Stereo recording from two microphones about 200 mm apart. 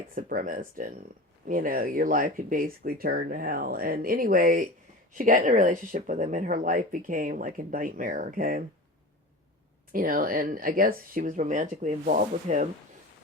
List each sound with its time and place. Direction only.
0.1 s speech: 45° right (ahead or behind)
9.9 s speech: 45° right (ahead or behind)